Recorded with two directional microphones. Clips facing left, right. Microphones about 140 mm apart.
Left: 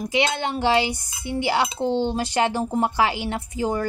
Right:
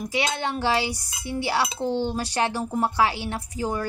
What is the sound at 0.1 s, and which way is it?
A woman's voice, 20° left (ahead or behind).